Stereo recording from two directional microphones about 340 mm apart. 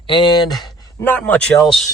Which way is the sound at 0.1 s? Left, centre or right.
Centre.